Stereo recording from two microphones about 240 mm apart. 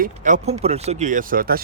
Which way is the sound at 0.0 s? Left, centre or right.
Right.